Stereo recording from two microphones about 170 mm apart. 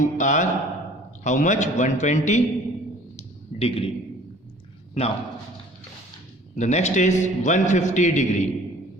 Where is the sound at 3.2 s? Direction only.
35° left (ahead or behind).